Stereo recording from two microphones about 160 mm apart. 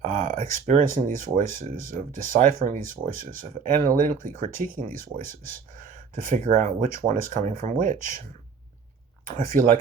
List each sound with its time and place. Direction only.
0.0 s speech: 55° right (ahead or behind)
9.2 s speech: 60° right (ahead or behind)